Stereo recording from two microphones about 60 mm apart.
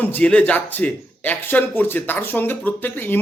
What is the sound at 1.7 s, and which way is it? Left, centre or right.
Speech, left.